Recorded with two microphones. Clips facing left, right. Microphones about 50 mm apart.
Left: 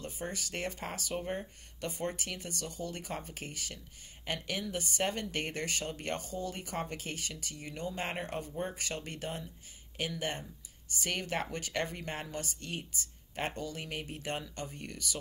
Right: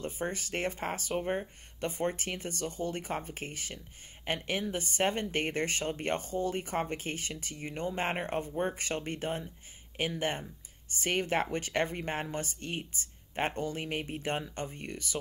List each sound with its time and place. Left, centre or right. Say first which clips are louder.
0.0 s a woman's voice: right 4 dB; right
1.1 s a woman's voice: right 4 dB; right